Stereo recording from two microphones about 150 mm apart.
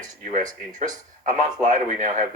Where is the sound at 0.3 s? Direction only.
55° right (ahead or behind).